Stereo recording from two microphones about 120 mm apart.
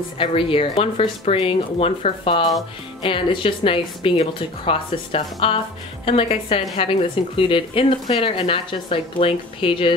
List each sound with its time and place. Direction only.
0.2 s speech: 50° left (ahead or behind)